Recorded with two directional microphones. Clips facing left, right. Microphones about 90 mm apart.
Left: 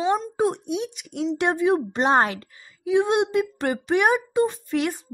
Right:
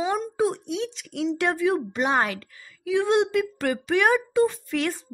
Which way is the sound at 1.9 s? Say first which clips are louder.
Left 4 dB; 35° left (ahead or behind).